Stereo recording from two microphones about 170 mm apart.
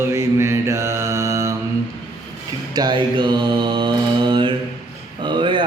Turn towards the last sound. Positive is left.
turn(degrees=-30)  # may be behind; listen again after turning